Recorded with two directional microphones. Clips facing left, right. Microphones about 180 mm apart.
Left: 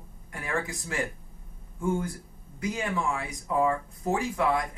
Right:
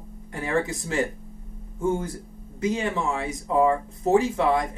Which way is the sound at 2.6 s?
25° right (ahead or behind).